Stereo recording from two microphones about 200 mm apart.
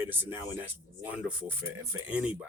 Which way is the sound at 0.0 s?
10° right (ahead or behind).